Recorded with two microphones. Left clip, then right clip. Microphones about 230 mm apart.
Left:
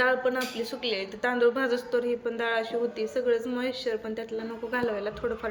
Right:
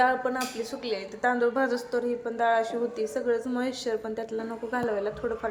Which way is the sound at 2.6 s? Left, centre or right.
Right.